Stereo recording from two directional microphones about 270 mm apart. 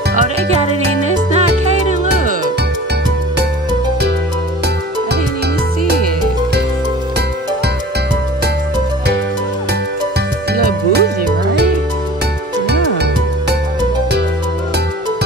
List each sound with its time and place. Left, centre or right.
10.5 s music: right
12.6 s music: right